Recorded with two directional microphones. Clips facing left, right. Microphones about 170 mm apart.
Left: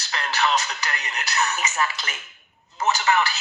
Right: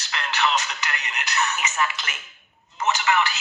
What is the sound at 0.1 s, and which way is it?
Speech, 35° left (ahead or behind).